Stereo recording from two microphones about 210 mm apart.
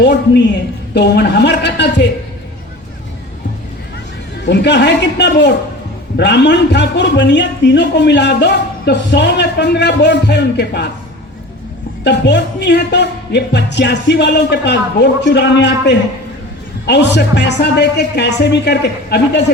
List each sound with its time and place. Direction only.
0.9 s a man's voice: 55° left (ahead or behind)
4.4 s a man's voice: 55° left (ahead or behind)
12.0 s a man's voice: 55° left (ahead or behind)